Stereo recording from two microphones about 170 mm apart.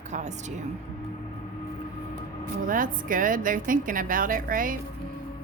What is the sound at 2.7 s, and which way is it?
A woman's voice, 55° right (ahead or behind).